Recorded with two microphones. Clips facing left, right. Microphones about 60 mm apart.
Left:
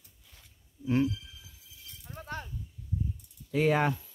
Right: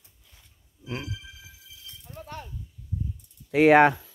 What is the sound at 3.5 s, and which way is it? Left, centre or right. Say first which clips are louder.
Speech: right 10 dB; right.